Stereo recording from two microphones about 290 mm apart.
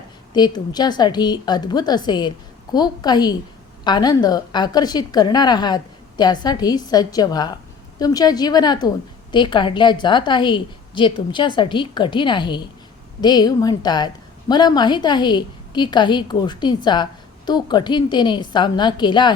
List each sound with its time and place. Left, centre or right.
0.3 s a woman's voice: centre